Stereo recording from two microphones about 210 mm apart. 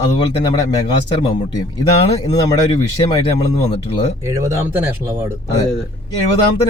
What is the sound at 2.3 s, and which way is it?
Speech, 20° left (ahead or behind).